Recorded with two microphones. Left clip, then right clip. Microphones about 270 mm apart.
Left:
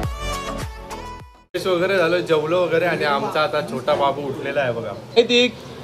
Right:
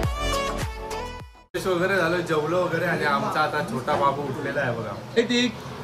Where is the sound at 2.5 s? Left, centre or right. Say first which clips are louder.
Left 5 dB; centre.